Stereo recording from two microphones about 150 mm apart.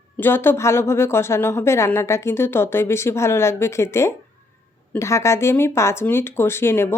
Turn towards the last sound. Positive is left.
turn(degrees=15)  # may be behind; listen again after turning